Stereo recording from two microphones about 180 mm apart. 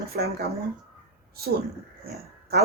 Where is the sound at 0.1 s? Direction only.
65° right (ahead or behind).